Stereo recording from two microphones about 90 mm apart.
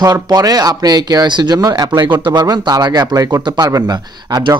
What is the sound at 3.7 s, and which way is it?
Speech, 45° right (ahead or behind).